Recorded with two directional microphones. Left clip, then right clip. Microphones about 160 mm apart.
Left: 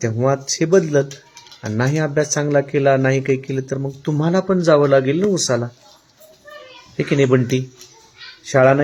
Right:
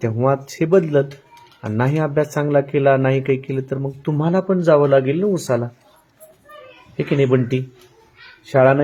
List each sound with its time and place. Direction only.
0.0 s speech: 5° left (ahead or behind)
4.0 s speech: 15° left (ahead or behind)
6.9 s a child's voice: 15° left (ahead or behind)